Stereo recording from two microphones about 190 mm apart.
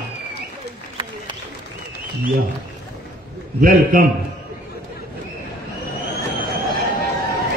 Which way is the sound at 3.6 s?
50° right (ahead or behind).